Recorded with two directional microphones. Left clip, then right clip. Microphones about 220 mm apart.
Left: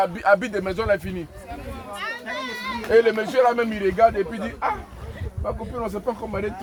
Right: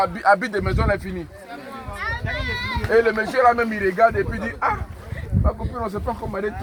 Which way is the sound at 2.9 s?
10° left (ahead or behind).